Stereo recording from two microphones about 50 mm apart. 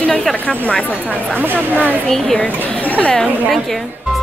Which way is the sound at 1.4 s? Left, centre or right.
Right.